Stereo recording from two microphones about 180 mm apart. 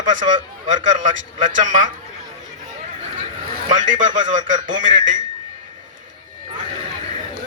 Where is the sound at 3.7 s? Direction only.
45° right (ahead or behind).